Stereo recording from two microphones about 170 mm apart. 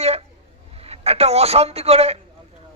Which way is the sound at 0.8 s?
35° right (ahead or behind).